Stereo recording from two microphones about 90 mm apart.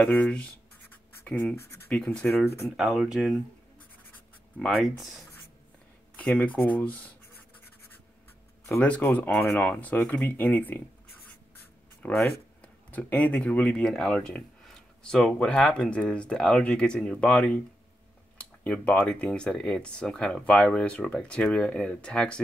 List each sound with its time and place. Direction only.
0.1 s speech: 15° left (ahead or behind)
2.7 s speech: 5° right (ahead or behind)
4.6 s speech: centre (ahead or behind)
6.1 s speech: 15° left (ahead or behind)
8.8 s speech: 15° left (ahead or behind)
12.0 s a sound: 5° left (ahead or behind)
12.9 s speech: 15° left (ahead or behind)